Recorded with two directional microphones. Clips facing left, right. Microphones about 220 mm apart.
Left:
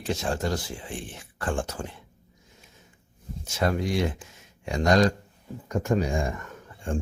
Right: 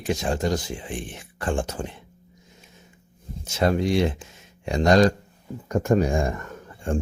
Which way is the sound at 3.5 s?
25° right (ahead or behind).